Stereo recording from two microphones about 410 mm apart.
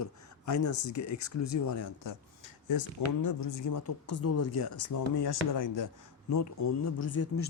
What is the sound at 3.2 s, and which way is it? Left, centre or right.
Speech, left.